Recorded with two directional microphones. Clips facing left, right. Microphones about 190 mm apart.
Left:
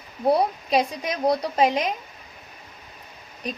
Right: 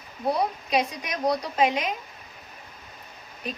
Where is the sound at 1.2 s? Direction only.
35° left (ahead or behind).